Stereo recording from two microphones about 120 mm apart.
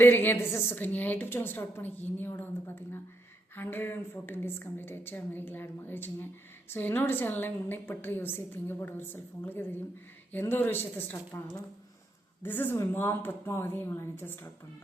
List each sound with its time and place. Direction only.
0.0 s a woman's voice: 15° left (ahead or behind)